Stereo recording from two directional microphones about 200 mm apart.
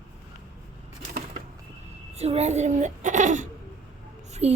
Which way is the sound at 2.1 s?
30° right (ahead or behind).